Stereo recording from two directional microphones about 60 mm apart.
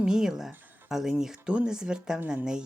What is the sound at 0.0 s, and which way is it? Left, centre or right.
Speech, centre.